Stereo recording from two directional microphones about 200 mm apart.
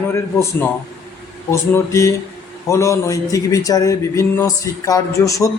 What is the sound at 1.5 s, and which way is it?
A man's voice, 15° left (ahead or behind).